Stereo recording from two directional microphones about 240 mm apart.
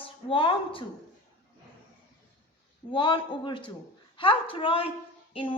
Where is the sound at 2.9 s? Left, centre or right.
Centre.